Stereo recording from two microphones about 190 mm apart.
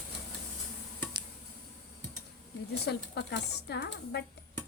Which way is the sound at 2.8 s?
60° left (ahead or behind).